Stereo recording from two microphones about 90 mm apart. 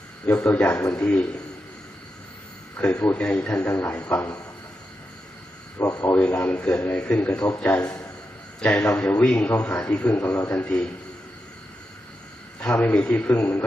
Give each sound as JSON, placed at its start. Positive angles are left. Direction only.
{"t": 0.5, "sound": "a man's voice", "side_deg": 15}
{"t": 0.8, "sound": "a man's voice", "side_deg": 30}
{"t": 1.0, "sound": "a man's voice", "side_deg": 15}
{"t": 2.7, "sound": "a man's voice", "side_deg": 20}
{"t": 3.7, "sound": "a man's voice", "side_deg": 25}
{"t": 3.9, "sound": "a man's voice", "side_deg": 15}
{"t": 5.8, "sound": "speech", "side_deg": 40}
{"t": 6.1, "sound": "a man's voice", "side_deg": 15}
{"t": 12.5, "sound": "a man's voice", "side_deg": 20}